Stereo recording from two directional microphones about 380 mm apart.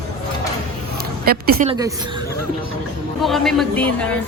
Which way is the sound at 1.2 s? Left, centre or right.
Right.